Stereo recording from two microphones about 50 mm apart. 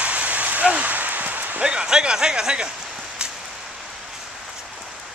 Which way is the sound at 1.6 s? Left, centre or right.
Centre.